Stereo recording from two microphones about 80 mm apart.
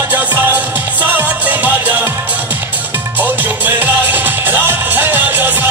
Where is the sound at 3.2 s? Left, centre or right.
Right.